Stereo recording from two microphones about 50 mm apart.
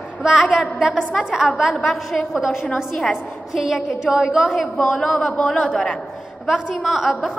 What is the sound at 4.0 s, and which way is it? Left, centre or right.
Speech, centre.